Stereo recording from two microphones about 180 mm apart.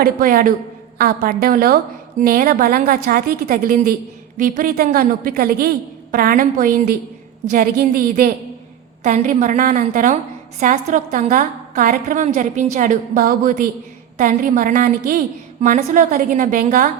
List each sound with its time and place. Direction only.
0.0 s a woman's voice: 55° right (ahead or behind)